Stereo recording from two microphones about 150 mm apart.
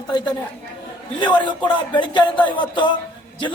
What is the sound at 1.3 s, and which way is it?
A man's voice, 30° left (ahead or behind).